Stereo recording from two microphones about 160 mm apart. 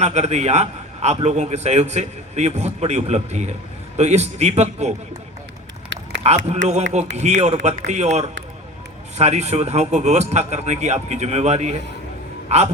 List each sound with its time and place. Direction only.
0.0 s a man's voice: 45° right (ahead or behind)
6.2 s a man's voice: 45° right (ahead or behind)